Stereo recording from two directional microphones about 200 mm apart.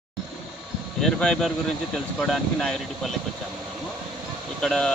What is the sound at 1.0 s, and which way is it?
Speech, 5° left (ahead or behind).